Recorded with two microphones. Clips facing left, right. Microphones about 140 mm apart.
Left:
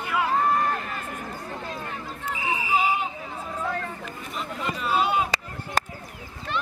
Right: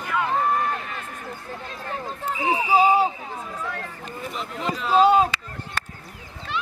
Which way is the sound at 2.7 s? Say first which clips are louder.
Right 7 dB; 35° right (ahead or behind).